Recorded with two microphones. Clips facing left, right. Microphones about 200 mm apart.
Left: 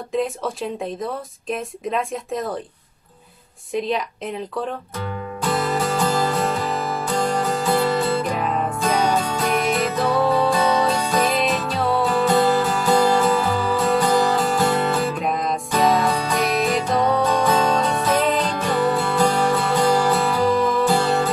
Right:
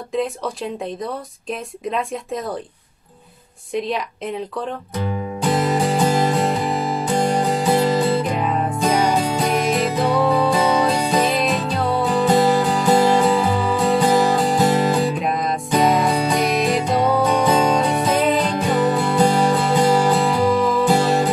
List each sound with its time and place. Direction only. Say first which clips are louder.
0.1 s speech: even; centre (ahead or behind)
3.7 s speech: even; centre (ahead or behind)
4.9 s music: right 4 dB; 20° right (ahead or behind)
8.4 s music: right 2 dB; centre (ahead or behind)
8.7 s music: right 2 dB; 20° right (ahead or behind)
11.3 s music: right 1 dB; centre (ahead or behind)
12.1 s music: right 3 dB; 20° right (ahead or behind)
15.2 s music: right 1 dB; centre (ahead or behind)
15.7 s music: right 2 dB; 15° right (ahead or behind)
16.9 s music: right 1 dB; 5° right (ahead or behind)
17.3 s music: right 2 dB; 20° right (ahead or behind)